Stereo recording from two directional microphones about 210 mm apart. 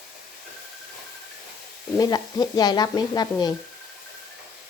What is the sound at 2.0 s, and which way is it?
Speech, 20° left (ahead or behind).